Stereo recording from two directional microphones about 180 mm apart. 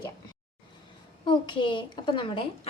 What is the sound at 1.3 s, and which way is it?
A woman's voice, 25° left (ahead or behind).